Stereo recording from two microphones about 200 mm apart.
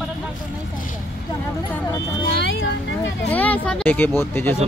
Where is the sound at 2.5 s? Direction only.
65° left (ahead or behind).